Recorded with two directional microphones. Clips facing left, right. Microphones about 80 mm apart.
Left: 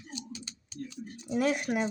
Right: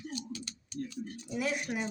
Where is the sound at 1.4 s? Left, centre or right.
Left.